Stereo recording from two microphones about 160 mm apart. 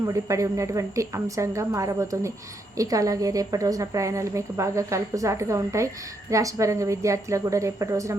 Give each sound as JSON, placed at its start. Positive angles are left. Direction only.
{"t": 0.0, "sound": "a woman's voice", "side_deg": -20}